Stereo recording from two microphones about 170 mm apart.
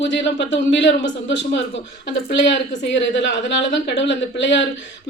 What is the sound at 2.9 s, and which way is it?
A man's voice, 90° left.